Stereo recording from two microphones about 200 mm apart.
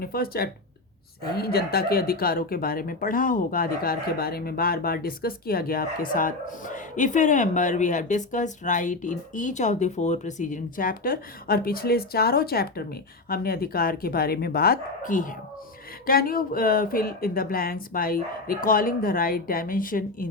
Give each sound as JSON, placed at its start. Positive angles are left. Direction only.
{"t": 0.0, "sound": "speech", "side_deg": 50}